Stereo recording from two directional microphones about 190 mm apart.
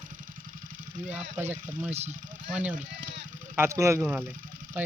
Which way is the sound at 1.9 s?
35° right (ahead or behind).